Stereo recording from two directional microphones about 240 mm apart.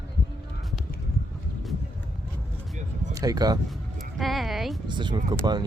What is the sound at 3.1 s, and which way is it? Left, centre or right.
Speech, centre.